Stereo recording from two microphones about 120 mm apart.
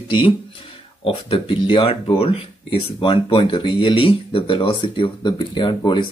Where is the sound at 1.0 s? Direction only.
45° left (ahead or behind).